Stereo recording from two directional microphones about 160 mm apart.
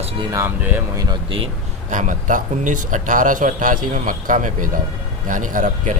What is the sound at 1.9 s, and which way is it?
Speech, 50° right (ahead or behind).